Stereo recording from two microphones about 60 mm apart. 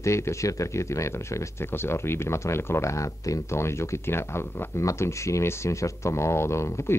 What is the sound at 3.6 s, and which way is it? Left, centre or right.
Speech, left.